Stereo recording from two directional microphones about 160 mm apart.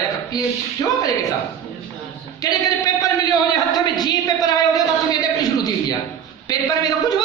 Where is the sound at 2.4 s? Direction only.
20° left (ahead or behind).